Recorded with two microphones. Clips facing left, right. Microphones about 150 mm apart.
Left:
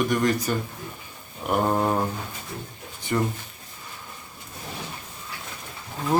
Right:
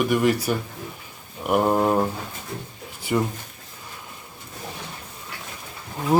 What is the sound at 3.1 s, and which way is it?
Speech, 10° right (ahead or behind).